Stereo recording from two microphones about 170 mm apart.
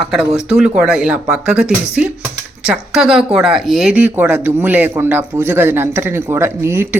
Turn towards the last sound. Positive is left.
turn(degrees=-15)  # may be behind; listen again after turning